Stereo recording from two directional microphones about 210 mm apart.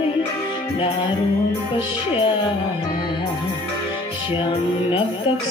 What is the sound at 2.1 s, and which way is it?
Music, 25° left (ahead or behind).